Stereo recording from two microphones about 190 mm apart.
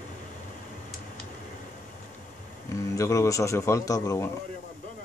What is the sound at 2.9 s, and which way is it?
A man's voice, 15° left (ahead or behind).